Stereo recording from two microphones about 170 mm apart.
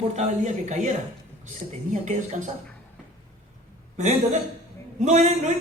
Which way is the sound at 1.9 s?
45° right (ahead or behind).